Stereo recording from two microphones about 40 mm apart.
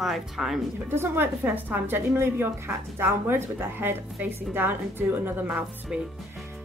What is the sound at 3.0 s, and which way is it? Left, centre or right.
Speech, right.